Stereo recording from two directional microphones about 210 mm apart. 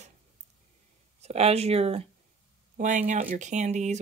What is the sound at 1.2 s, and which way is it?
Speech, 30° right (ahead or behind).